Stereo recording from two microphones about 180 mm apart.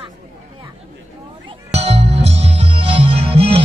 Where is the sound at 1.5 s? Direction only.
35° right (ahead or behind).